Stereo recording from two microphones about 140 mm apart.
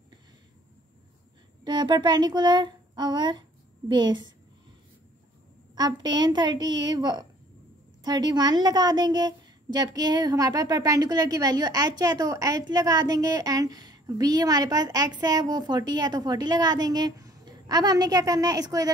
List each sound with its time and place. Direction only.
1.6 s a child's voice: 30° right (ahead or behind)
5.8 s a child's voice: 30° right (ahead or behind)